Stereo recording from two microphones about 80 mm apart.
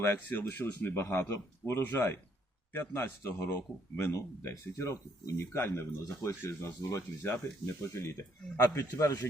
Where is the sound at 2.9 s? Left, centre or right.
Left.